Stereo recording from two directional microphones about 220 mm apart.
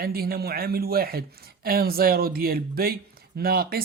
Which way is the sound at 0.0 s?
45° right (ahead or behind).